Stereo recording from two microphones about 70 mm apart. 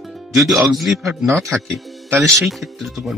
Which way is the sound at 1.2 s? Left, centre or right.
Right.